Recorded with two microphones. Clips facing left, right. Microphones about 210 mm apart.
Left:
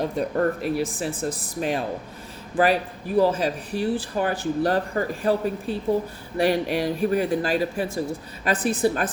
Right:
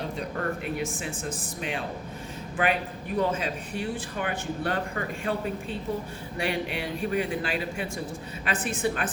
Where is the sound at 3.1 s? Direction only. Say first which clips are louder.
Left 7 dB; 35° left (ahead or behind).